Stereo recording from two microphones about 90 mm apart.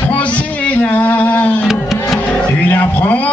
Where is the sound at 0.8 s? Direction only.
20° left (ahead or behind).